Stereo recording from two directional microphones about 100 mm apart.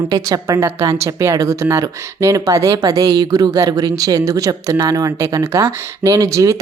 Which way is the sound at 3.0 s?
45° right (ahead or behind).